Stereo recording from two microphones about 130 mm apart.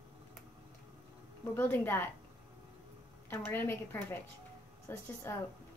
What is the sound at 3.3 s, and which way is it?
A child's voice, 15° left (ahead or behind).